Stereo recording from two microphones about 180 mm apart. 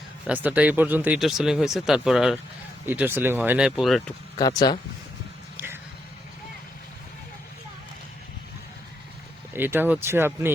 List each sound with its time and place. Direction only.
0.3 s speech: 10° right (ahead or behind)
4.4 s speech: 20° left (ahead or behind)
5.5 s a sound: 10° right (ahead or behind)
9.5 s speech: 10° right (ahead or behind)